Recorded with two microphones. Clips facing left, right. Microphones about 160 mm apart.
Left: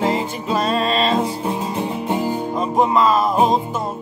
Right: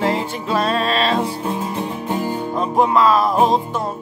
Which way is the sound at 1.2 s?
20° left (ahead or behind).